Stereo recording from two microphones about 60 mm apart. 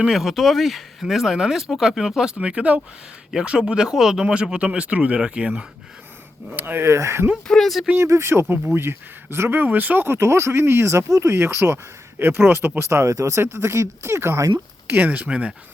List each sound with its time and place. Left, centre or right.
0.1 s speech: centre
6.5 s speech: right
6.8 s speech: right
7.4 s speech: centre
7.9 s speech: right
10.1 s speech: right
11.3 s speech: right
12.2 s speech: right
13.4 s speech: right
14.8 s speech: right